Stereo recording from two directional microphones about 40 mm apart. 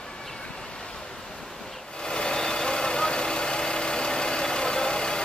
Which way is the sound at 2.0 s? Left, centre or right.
Centre.